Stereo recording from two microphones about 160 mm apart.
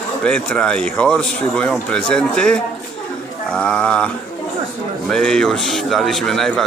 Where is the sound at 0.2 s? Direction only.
5° left (ahead or behind).